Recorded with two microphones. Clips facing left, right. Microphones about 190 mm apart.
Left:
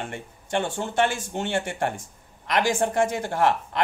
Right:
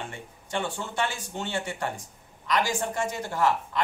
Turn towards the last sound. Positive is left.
turn(degrees=60)  # may be behind; listen again after turning